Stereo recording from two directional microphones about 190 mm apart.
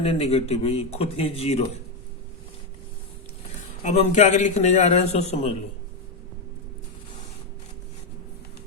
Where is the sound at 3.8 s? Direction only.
40° left (ahead or behind).